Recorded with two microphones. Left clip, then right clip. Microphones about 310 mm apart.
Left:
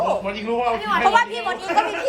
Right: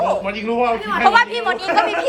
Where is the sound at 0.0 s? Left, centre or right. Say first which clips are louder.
Right 3 dB; centre.